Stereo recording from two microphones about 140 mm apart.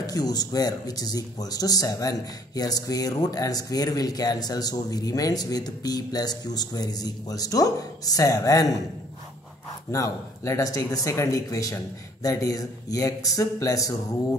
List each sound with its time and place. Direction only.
0.0 s speech: 30° left (ahead or behind)
9.8 s speech: 20° left (ahead or behind)